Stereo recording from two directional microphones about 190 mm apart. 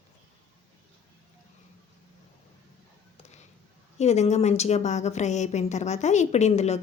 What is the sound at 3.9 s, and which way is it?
A woman's voice, 35° left (ahead or behind).